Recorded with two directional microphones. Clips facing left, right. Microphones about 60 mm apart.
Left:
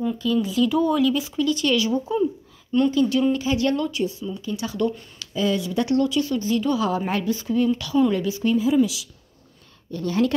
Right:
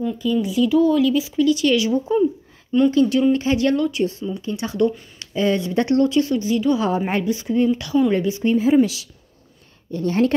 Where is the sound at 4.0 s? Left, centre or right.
Right.